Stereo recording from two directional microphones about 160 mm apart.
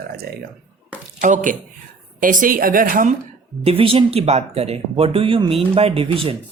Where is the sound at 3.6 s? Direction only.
35° right (ahead or behind).